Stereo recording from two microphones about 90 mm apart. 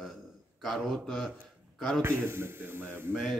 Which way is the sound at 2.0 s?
25° right (ahead or behind).